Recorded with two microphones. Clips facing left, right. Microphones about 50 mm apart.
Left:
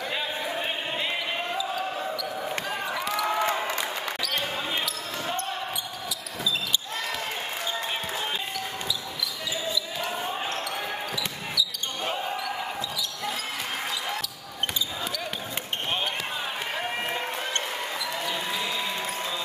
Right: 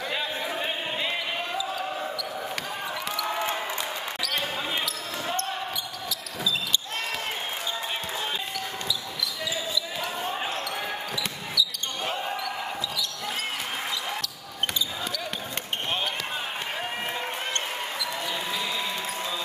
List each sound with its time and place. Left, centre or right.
0.1 s a sound: centre
1.6 s basketball bounce: centre
3.3 s a sound: left
4.2 s basketball bounce: centre
10.0 s basketball bounce: centre
10.3 s basketball bounce: centre
17.1 s basketball bounce: left
18.1 s basketball bounce: centre